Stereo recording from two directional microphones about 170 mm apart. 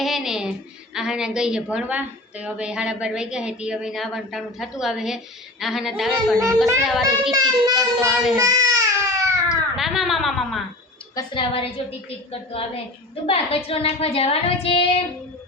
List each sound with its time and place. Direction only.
0.0 s a woman's voice: centre (ahead or behind)
8.4 s baby cry: 20° right (ahead or behind)
9.5 s a sound: centre (ahead or behind)
11.1 s a woman's voice: 25° left (ahead or behind)